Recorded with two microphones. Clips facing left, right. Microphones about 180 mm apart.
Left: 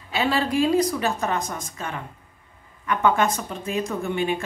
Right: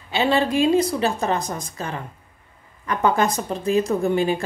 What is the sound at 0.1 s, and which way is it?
A woman's voice, 25° right (ahead or behind).